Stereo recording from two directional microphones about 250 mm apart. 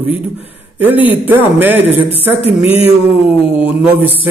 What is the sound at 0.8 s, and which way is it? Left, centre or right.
A man's voice, centre.